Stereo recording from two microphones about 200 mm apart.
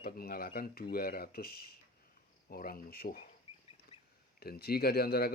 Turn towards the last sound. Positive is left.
turn(degrees=50)  # may be behind; listen again after turning